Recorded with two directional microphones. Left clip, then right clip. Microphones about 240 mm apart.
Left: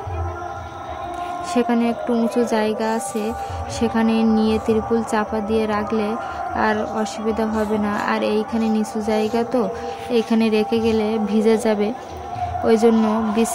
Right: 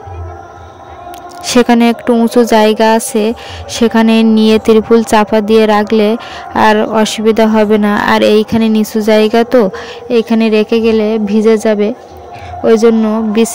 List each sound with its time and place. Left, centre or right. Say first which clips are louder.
1.4 s a woman's voice: right 12 dB; right